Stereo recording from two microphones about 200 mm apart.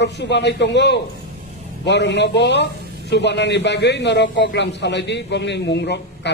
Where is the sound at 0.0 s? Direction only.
60° left (ahead or behind).